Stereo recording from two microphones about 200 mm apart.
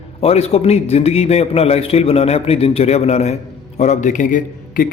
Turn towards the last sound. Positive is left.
turn(degrees=45)  # may be behind; listen again after turning